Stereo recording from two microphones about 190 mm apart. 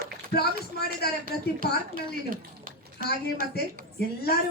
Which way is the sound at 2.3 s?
50° right (ahead or behind).